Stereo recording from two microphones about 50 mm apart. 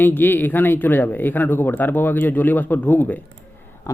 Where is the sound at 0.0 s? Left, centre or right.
Left.